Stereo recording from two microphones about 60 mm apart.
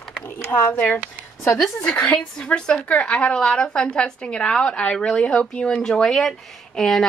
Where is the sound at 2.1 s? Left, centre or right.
Centre.